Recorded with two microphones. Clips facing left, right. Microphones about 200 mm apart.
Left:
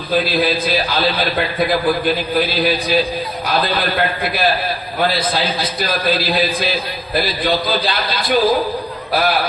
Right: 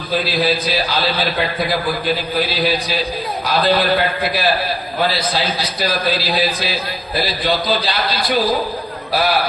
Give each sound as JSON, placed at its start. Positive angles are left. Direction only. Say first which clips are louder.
{"t": 0.4, "sound": "a man's voice", "louder": "left 1 dB", "side_deg": 50}
{"t": 6.1, "sound": "a man's voice", "louder": "left 1 dB", "side_deg": 50}